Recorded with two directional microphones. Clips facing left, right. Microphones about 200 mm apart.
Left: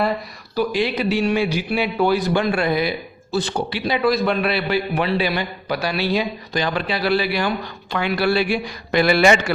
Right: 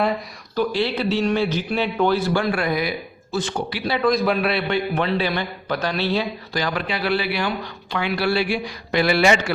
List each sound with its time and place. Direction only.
0.5 s a man's voice: 10° left (ahead or behind)
4.0 s a man's voice: centre (ahead or behind); by 9.3 s 50° left (ahead or behind)